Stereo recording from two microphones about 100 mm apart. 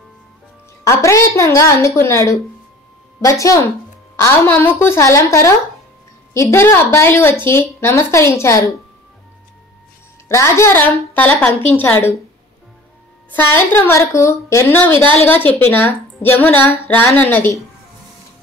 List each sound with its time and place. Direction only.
0.8 s a woman's voice: 30° left (ahead or behind)
4.2 s a woman's voice: 20° left (ahead or behind)
10.2 s a woman's voice: 30° left (ahead or behind)
13.3 s a woman's voice: 20° left (ahead or behind)